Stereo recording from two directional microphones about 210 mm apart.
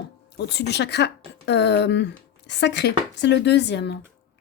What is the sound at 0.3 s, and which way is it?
Speech, 50° left (ahead or behind).